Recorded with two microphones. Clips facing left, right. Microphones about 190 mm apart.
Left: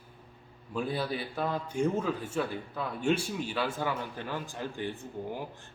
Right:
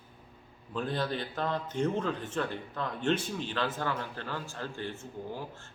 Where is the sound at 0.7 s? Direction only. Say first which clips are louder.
Even; 10° left (ahead or behind).